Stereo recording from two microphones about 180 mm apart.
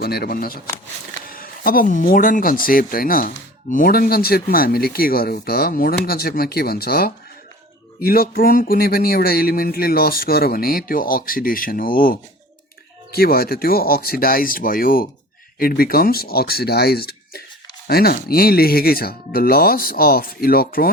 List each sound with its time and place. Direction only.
0.0 s speech: 60° left (ahead or behind)